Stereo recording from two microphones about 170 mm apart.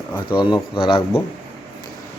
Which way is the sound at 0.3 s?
30° left (ahead or behind).